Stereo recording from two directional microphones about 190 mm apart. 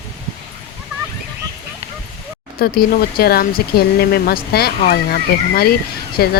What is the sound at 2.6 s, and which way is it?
Speech, 50° left (ahead or behind).